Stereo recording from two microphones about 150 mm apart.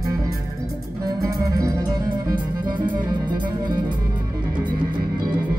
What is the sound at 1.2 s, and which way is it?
Music, 25° right (ahead or behind).